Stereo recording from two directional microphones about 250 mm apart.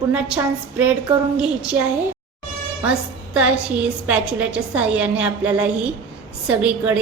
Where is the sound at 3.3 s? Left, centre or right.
Centre.